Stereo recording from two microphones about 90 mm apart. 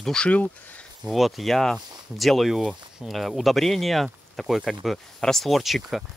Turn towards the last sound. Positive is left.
turn(degrees=0)  # may be behind; listen again after turning